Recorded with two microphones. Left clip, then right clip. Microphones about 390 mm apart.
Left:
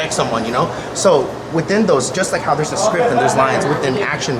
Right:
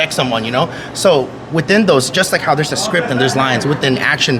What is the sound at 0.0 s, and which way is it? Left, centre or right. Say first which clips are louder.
Speech: right 2 dB; right.